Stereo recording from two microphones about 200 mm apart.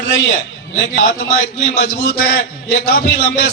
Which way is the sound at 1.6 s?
50° left (ahead or behind).